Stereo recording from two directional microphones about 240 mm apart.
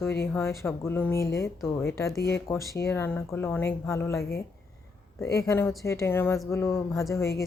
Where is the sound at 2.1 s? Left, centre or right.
Left.